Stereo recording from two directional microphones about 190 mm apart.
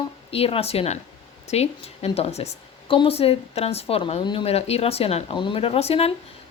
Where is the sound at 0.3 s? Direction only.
30° left (ahead or behind).